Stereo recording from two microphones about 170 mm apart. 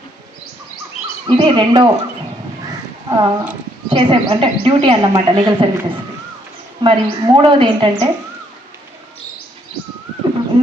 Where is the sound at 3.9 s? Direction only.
30° right (ahead or behind).